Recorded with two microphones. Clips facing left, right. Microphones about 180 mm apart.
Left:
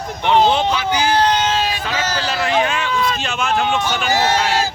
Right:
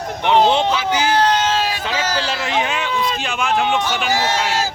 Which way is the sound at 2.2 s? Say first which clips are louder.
Left 3 dB; 25° right (ahead or behind).